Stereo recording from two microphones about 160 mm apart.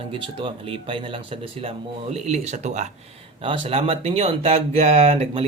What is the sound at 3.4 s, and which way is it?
Speech, 35° right (ahead or behind).